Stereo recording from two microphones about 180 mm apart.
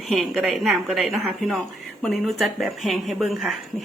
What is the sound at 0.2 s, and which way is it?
Speech, centre (ahead or behind).